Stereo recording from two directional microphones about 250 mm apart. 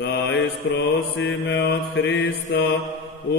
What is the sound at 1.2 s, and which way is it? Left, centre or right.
Mantra, left.